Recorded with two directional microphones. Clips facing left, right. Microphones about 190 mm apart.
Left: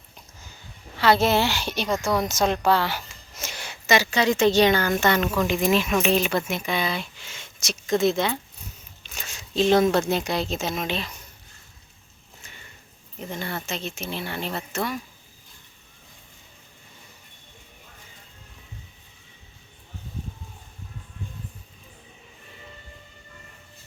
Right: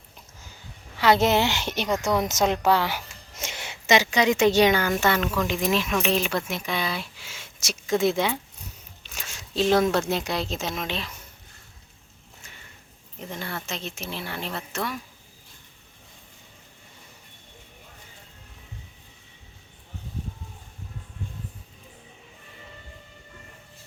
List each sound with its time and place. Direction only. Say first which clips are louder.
0.9 s a woman's voice: even; 15° right (ahead or behind)
9.1 s a sound: left 2 dB; centre (ahead or behind)
10.1 s speech: left 2 dB; centre (ahead or behind)
13.1 s speech: left 2 dB; centre (ahead or behind)